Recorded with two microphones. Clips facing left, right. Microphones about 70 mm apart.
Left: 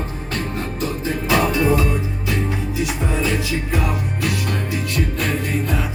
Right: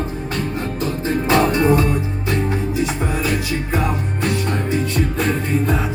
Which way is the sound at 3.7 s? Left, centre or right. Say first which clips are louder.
Right 2 dB; right.